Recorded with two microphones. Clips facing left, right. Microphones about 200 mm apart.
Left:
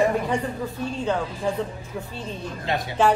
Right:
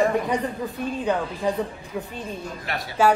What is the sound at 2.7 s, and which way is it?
Speech, 20° left (ahead or behind).